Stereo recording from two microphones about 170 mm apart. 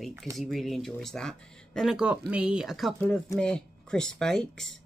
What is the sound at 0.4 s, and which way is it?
Speech, centre (ahead or behind).